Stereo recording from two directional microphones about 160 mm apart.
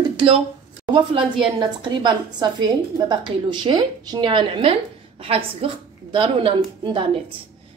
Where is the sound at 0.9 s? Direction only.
30° right (ahead or behind).